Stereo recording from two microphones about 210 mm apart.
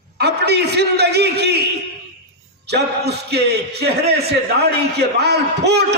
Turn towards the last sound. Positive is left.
turn(degrees=-50)  # may be behind; listen again after turning